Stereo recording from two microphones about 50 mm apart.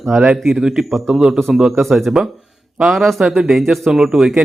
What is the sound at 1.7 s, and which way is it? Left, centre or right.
Speech, centre.